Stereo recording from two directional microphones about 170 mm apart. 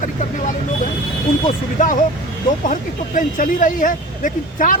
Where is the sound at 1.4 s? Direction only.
50° left (ahead or behind).